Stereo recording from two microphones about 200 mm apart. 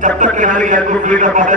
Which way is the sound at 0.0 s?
40° right (ahead or behind).